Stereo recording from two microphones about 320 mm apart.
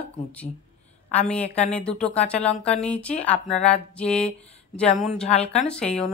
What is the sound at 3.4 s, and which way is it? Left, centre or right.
Speech, left.